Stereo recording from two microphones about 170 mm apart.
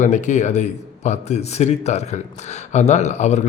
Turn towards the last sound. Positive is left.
turn(degrees=40)  # may be behind; listen again after turning